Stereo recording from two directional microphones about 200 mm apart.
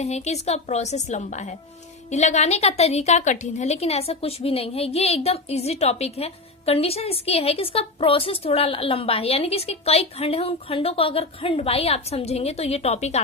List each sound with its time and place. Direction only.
0.0 s a woman's voice: 35° left (ahead or behind)